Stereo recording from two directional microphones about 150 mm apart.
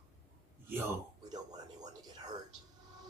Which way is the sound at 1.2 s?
25° right (ahead or behind).